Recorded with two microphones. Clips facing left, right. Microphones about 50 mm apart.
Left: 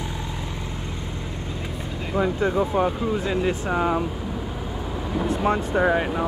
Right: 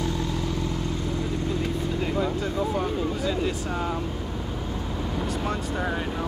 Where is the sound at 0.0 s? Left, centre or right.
Centre.